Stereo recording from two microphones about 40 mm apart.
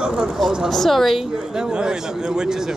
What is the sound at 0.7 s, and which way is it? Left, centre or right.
Speech, centre.